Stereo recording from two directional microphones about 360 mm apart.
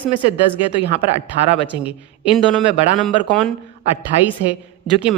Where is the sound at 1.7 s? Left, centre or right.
Centre.